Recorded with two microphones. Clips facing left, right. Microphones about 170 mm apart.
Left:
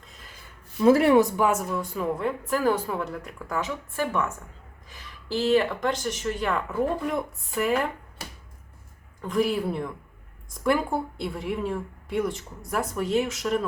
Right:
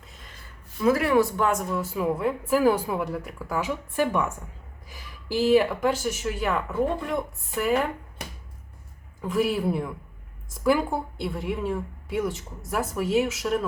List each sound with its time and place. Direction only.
0.0 s a sound: centre (ahead or behind)
0.8 s speech: 30° left (ahead or behind)
1.4 s a woman's voice: 5° left (ahead or behind)
9.2 s a woman's voice: 5° right (ahead or behind)